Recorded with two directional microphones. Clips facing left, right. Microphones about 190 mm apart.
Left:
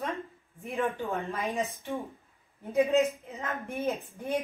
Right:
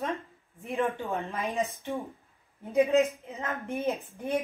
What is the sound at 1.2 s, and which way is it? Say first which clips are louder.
Speech: right 1 dB; 15° right (ahead or behind).